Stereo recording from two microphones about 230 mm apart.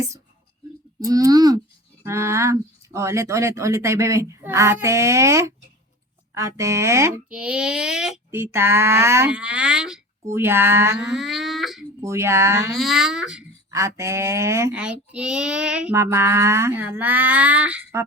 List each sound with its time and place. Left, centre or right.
0.9 s speech: centre
12.0 s speech: centre
12.7 s speech: centre
13.7 s speech: centre